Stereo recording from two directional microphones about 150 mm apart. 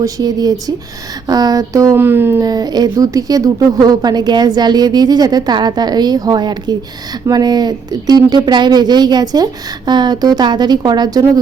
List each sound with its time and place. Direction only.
0.0 s speech: 25° right (ahead or behind)
2.5 s speech: 25° right (ahead or behind)